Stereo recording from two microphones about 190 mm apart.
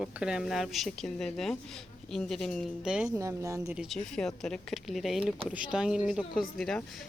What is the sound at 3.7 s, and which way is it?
Speech, centre (ahead or behind).